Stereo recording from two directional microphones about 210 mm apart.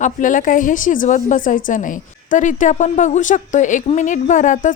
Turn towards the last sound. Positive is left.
turn(degrees=35)  # may be behind; listen again after turning